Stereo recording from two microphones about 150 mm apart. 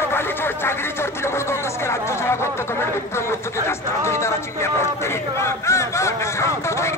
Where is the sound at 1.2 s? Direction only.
15° left (ahead or behind).